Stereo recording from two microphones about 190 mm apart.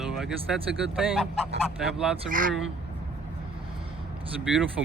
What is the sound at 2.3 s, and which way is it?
Speech, 45° right (ahead or behind).